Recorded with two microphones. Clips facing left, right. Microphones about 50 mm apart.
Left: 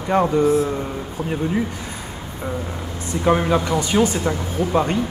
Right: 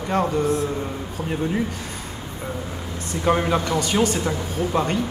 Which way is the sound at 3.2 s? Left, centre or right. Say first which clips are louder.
Left 2 dB; centre.